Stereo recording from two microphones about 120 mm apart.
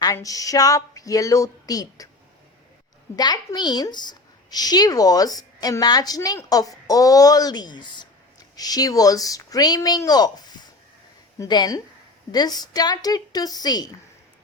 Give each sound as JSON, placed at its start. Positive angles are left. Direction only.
{"t": 0.0, "sound": "speech", "side_deg": 30}
{"t": 3.2, "sound": "a woman's voice", "side_deg": 35}